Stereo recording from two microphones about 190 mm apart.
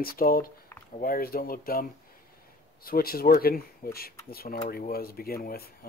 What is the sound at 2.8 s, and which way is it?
Speech, 50° left (ahead or behind).